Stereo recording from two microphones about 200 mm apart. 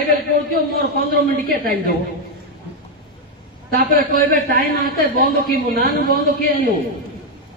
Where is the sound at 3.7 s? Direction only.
45° right (ahead or behind).